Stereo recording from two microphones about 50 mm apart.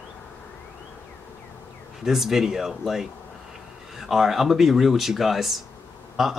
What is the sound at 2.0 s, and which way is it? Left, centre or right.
A man's voice, centre.